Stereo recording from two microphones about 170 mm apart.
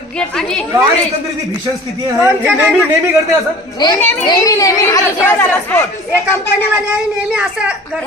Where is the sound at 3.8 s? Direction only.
20° left (ahead or behind).